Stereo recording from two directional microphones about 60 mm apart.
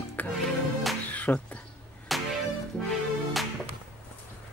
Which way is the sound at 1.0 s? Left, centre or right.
Left.